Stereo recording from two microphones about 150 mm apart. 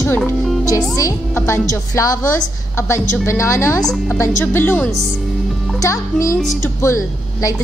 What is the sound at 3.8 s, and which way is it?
Speech, 5° left (ahead or behind).